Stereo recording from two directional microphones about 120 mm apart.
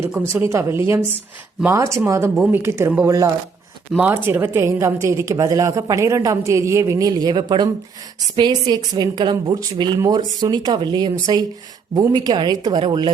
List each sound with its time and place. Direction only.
0.1 s a woman's voice: 15° right (ahead or behind)
3.9 s a woman's voice: 15° right (ahead or behind); by 13.1 s 40° right (ahead or behind)